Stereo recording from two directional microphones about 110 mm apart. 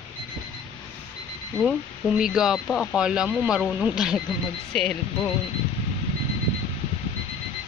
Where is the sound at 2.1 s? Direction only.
5° right (ahead or behind).